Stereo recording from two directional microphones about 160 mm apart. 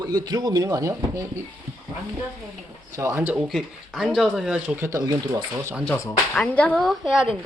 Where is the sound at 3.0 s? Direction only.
15° right (ahead or behind).